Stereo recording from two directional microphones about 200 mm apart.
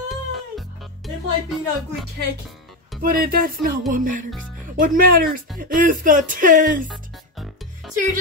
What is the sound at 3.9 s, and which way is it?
Music, 40° right (ahead or behind).